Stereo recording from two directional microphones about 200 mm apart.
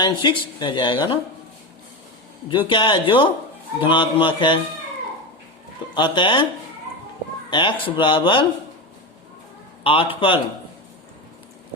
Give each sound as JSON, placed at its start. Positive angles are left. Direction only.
{"t": 0.0, "sound": "speech", "side_deg": 20}
{"t": 2.5, "sound": "speech", "side_deg": 25}
{"t": 5.9, "sound": "speech", "side_deg": 25}
{"t": 7.5, "sound": "speech", "side_deg": 25}
{"t": 9.8, "sound": "speech", "side_deg": 25}